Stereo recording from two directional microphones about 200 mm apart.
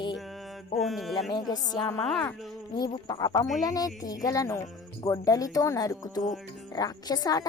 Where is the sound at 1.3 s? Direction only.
20° left (ahead or behind).